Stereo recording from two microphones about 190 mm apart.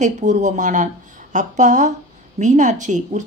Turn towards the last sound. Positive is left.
turn(degrees=-40)  # may be behind; listen again after turning